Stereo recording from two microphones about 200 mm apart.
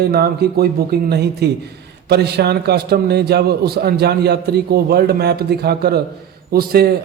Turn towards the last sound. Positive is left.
turn(degrees=-50)  # may be behind; listen again after turning